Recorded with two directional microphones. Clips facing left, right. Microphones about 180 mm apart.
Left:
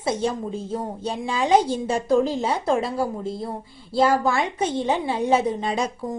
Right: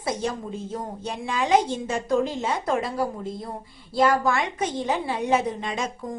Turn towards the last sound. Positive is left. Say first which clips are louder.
# left 4 dB
turn(degrees=35)  # may be behind; listen again after turning